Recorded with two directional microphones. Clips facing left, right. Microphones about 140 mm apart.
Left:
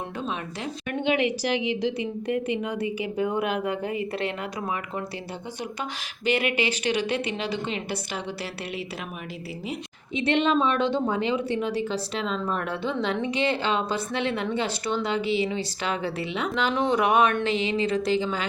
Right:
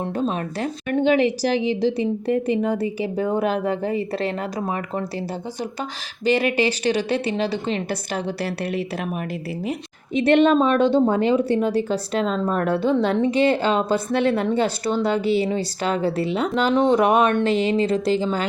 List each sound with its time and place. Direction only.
0.2 s a woman's voice: 40° right (ahead or behind)
6.2 s a woman's voice: 35° right (ahead or behind)
10.2 s a woman's voice: 50° right (ahead or behind)